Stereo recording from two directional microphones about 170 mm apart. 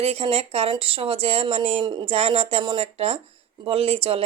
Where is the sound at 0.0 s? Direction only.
35° right (ahead or behind).